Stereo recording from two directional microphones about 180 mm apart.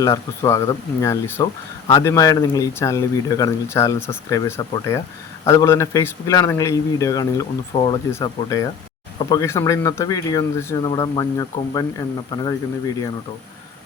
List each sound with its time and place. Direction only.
0.0 s speech: 15° left (ahead or behind)